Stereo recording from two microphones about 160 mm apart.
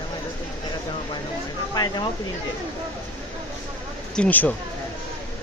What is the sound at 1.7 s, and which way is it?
Speech, 25° left (ahead or behind).